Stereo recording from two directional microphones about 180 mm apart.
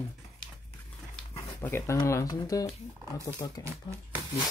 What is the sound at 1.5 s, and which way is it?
Speech, 15° left (ahead or behind).